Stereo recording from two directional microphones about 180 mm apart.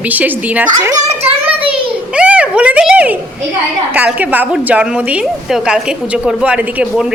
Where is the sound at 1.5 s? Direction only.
30° right (ahead or behind).